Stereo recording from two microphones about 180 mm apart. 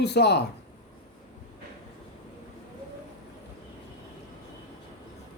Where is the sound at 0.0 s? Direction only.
65° left (ahead or behind).